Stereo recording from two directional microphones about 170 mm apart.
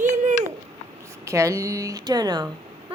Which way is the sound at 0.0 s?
45° right (ahead or behind).